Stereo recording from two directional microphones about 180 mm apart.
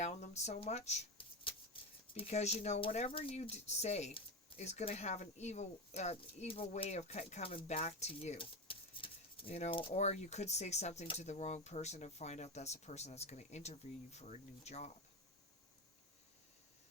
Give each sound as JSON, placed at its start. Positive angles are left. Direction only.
{"t": 0.0, "sound": "speech", "side_deg": 40}